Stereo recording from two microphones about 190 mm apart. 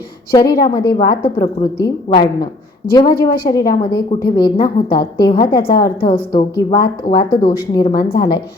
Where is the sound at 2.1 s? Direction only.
35° left (ahead or behind).